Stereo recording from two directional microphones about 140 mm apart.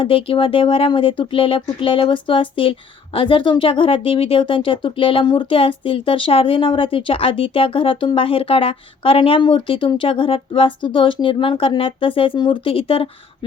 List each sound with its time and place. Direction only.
0.0 s speech: 40° left (ahead or behind)